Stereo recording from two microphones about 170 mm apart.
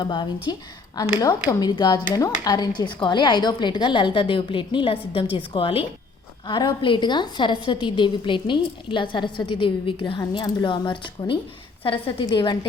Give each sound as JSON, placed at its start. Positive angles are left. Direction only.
{"t": 0.0, "sound": "a woman's voice", "side_deg": 25}